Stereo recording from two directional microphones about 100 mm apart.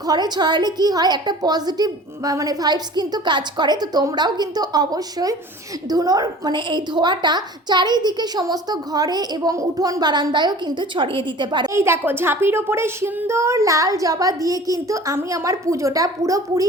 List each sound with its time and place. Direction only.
0.1 s a woman's voice: 45° right (ahead or behind)
11.7 s a woman's voice: 25° right (ahead or behind)